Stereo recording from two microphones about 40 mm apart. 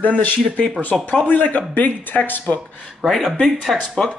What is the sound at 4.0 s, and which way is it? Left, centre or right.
Speech, centre.